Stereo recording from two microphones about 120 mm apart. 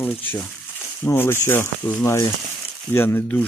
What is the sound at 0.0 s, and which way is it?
Speech, 15° left (ahead or behind).